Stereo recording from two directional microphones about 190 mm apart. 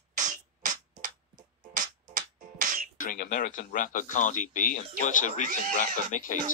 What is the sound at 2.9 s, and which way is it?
Speech, 45° left (ahead or behind).